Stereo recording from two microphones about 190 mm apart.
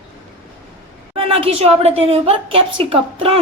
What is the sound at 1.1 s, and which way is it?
A woman's voice, 30° right (ahead or behind).